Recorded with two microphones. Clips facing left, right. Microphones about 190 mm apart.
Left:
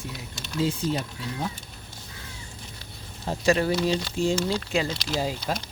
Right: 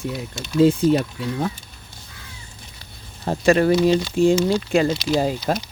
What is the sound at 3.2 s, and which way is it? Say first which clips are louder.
Speech: right 6 dB; 60° right (ahead or behind).